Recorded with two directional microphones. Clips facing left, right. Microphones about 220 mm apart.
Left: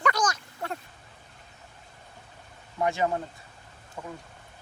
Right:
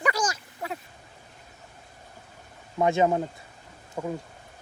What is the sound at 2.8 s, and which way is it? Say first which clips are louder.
Speech: right 5 dB; 25° right (ahead or behind).